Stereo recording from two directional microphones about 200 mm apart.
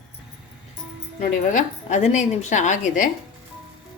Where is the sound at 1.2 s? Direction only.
35° left (ahead or behind).